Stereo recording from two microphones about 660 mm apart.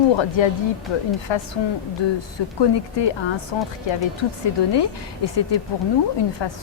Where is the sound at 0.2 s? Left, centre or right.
Left.